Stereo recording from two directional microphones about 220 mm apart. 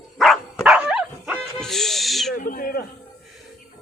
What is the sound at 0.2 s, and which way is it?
Dog, centre (ahead or behind).